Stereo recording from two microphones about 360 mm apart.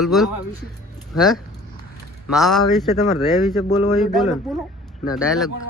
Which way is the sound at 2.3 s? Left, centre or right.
Centre.